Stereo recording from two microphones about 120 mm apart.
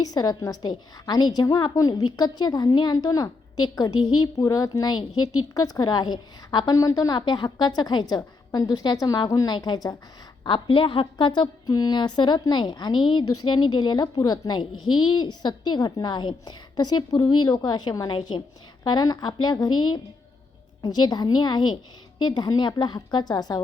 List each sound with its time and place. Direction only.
0.0 s a woman's voice: 35° left (ahead or behind)
10.4 s a woman's voice: 45° left (ahead or behind)